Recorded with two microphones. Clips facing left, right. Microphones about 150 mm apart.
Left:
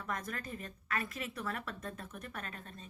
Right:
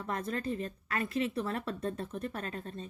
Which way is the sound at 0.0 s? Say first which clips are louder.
Right 6 dB; 30° right (ahead or behind).